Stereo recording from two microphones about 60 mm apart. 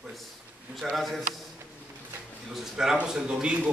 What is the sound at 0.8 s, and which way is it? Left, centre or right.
Speech, centre.